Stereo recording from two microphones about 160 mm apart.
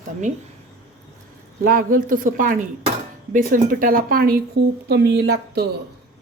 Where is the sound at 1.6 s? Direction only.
60° right (ahead or behind); by 5.6 s 90° right.